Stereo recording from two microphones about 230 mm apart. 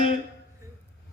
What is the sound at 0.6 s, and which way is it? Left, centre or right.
Music, centre.